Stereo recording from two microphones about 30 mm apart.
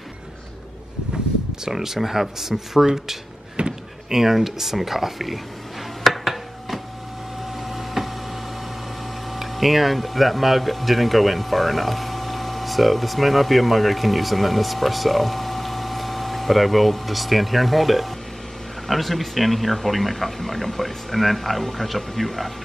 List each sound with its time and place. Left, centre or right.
1.6 s speech: centre
3.6 s a sound: right
4.1 s speech: centre
6.0 s a sound: centre
7.4 s printer: centre
9.3 s speech: centre